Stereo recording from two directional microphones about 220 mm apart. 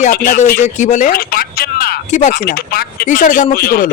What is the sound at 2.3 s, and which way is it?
A man's voice, 45° left (ahead or behind).